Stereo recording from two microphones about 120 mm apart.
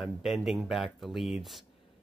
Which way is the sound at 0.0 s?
5° right (ahead or behind).